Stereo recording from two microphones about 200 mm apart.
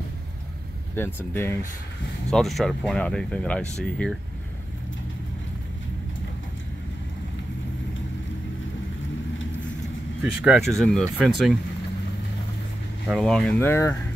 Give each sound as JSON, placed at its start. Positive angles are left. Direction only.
{"t": 0.9, "sound": "speech", "side_deg": 10}
{"t": 2.3, "sound": "speech", "side_deg": 0}
{"t": 10.2, "sound": "speech", "side_deg": -5}
{"t": 13.1, "sound": "speech", "side_deg": 0}